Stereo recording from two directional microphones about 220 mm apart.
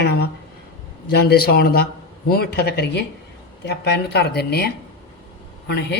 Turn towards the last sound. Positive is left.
turn(degrees=50)  # may be behind; listen again after turning